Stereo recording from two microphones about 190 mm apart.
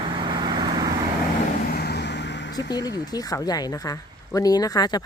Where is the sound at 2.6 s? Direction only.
20° left (ahead or behind).